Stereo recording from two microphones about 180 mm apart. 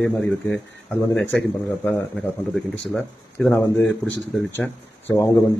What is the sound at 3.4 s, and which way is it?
Speech, 5° left (ahead or behind).